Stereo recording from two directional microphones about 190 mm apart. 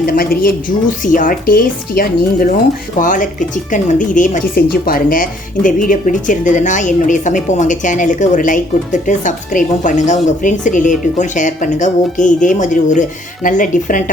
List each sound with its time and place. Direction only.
0.0 s a woman's voice: 50° left (ahead or behind)